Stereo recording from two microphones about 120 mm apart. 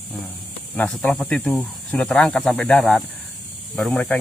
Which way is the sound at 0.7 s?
5° left (ahead or behind).